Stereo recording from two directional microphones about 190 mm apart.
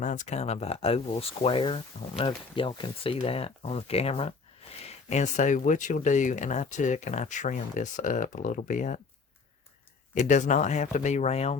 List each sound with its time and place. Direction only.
0.0 s speech: 40° left (ahead or behind)
10.2 s speech: 40° left (ahead or behind)